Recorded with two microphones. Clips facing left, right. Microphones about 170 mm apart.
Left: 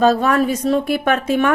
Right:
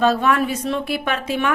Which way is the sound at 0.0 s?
40° left (ahead or behind).